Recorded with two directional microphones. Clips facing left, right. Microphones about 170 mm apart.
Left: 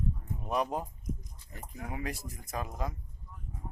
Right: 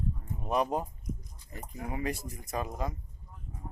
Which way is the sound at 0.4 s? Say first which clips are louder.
Right 3 dB; centre (ahead or behind).